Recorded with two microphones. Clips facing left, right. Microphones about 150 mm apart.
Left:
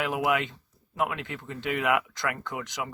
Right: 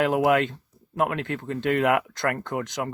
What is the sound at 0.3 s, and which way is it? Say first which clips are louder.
Speech: right 6 dB; 55° right (ahead or behind).